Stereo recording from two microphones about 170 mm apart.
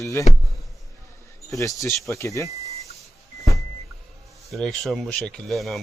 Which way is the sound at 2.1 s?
20° left (ahead or behind).